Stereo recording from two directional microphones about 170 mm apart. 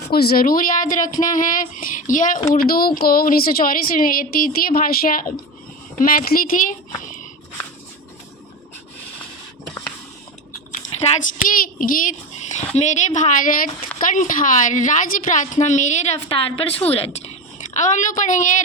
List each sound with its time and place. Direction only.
0.1 s a woman's voice: 65° left (ahead or behind)
10.7 s a sound: 50° left (ahead or behind)
12.7 s a woman's voice: 45° left (ahead or behind)